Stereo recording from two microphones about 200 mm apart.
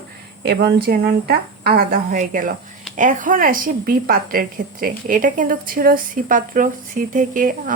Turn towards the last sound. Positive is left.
turn(degrees=-45)  # may be behind; listen again after turning